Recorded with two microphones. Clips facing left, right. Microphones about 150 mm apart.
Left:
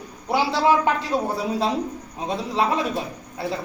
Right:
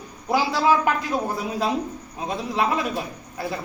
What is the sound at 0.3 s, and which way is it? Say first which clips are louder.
Speech: left 1 dB; 30° left (ahead or behind).